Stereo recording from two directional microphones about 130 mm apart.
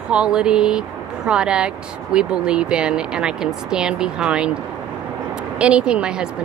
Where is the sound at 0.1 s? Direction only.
5° right (ahead or behind).